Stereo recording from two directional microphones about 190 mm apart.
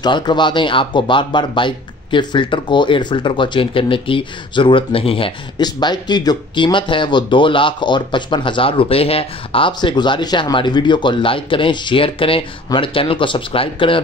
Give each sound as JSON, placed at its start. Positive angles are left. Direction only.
{"t": 0.0, "sound": "speech", "side_deg": 25}